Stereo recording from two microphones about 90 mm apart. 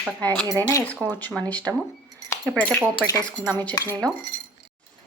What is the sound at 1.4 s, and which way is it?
Speech, 15° left (ahead or behind).